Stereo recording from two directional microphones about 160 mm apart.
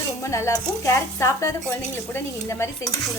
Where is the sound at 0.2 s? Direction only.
20° left (ahead or behind).